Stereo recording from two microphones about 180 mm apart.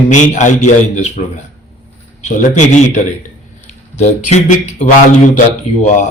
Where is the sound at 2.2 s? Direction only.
40° left (ahead or behind).